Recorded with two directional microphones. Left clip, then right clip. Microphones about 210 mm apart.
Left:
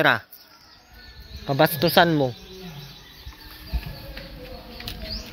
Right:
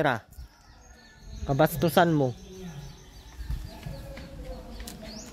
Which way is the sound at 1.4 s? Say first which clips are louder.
Left 4 dB; 10° right (ahead or behind).